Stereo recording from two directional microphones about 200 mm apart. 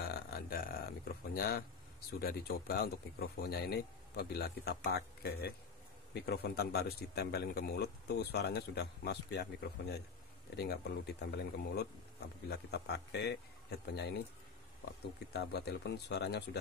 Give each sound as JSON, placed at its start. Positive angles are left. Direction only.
{"t": 0.1, "sound": "a sound", "side_deg": 50}
{"t": 1.3, "sound": "a man's voice", "side_deg": 50}
{"t": 15.3, "sound": "speech", "side_deg": 55}